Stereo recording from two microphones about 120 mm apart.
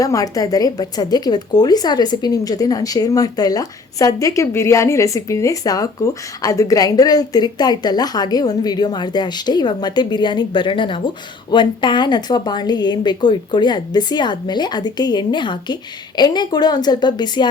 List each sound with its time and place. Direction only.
0.0 s speech: 30° left (ahead or behind)